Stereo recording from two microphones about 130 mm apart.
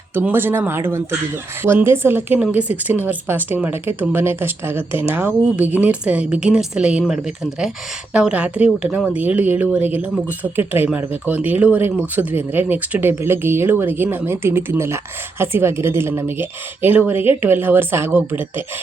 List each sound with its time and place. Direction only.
0.1 s speech: 15° right (ahead or behind)